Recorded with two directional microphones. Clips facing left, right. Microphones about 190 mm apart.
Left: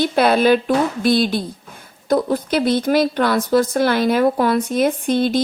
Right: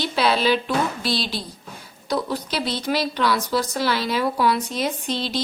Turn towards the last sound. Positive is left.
turn(degrees=50)  # may be behind; listen again after turning